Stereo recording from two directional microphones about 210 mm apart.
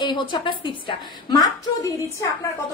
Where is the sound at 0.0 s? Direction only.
20° left (ahead or behind).